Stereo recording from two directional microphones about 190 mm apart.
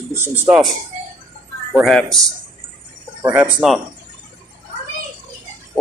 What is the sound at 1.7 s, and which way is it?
Speech, centre (ahead or behind).